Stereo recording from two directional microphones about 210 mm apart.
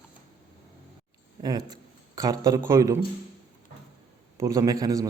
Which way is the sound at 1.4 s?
20° right (ahead or behind).